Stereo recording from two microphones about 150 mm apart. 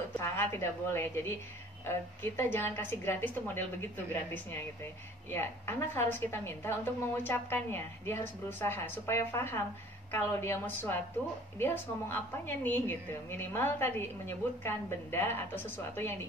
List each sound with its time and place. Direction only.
0.2 s a woman's voice: 15° left (ahead or behind)